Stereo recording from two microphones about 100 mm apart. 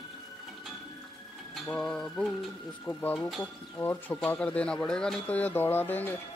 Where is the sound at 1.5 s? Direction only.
5° left (ahead or behind).